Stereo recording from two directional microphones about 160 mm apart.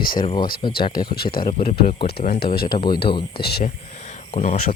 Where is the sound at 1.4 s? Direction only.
40° left (ahead or behind).